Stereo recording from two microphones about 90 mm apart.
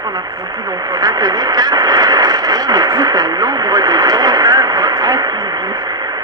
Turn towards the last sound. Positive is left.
turn(degrees=-50)  # may be behind; listen again after turning